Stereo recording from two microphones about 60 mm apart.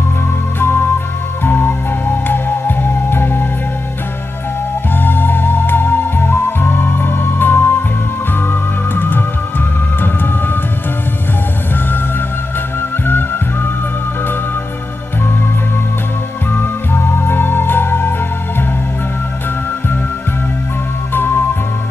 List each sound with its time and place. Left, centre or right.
0.6 s music: left
4.9 s music: left
13.0 s music: left
16.5 s music: left
21.1 s music: left